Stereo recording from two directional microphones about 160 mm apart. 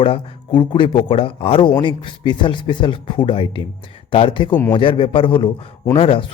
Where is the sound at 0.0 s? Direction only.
35° left (ahead or behind).